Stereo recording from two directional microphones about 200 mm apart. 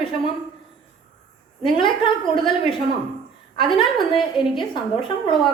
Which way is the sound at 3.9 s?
25° left (ahead or behind).